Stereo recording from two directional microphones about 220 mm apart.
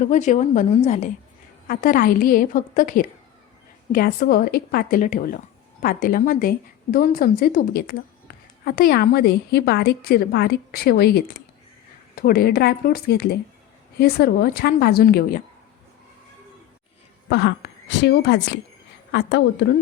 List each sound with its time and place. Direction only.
0.1 s a woman's voice: 35° left (ahead or behind)
17.2 s a woman's voice: 50° left (ahead or behind)